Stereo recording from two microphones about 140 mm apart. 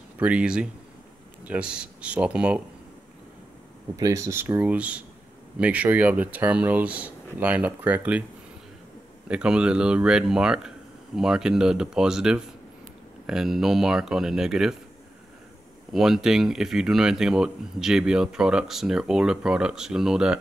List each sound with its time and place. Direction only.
0.2 s speech: 10° right (ahead or behind)
3.9 s speech: 20° right (ahead or behind)
9.3 s speech: 5° right (ahead or behind)
15.9 s speech: centre (ahead or behind)